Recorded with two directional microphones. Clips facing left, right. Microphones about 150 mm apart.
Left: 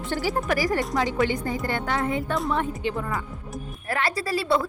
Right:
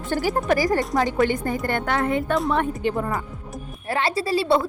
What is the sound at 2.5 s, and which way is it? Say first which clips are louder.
Speech: right 4 dB; 45° right (ahead or behind).